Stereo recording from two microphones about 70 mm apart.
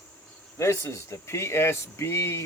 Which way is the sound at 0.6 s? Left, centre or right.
Left.